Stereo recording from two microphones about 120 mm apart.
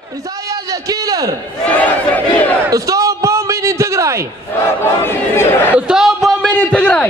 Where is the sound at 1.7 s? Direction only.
15° left (ahead or behind).